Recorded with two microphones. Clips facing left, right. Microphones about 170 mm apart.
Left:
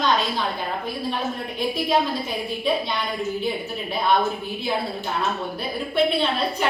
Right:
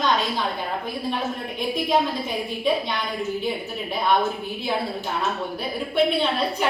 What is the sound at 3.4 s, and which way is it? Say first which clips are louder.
A woman's voice: left 1 dB; 10° right (ahead or behind).